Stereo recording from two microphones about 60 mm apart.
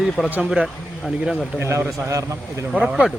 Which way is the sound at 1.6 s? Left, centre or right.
Right.